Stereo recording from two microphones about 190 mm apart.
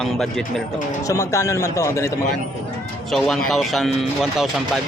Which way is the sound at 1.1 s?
15° left (ahead or behind).